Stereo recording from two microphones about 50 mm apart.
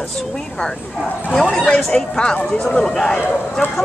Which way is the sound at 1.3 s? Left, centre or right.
Centre.